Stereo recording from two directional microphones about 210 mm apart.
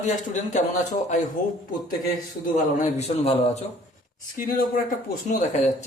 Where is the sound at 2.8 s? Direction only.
30° left (ahead or behind).